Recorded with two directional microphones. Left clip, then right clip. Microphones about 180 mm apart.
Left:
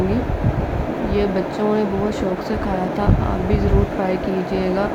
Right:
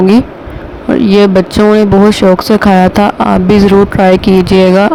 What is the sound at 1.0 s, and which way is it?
Speech, 60° right (ahead or behind).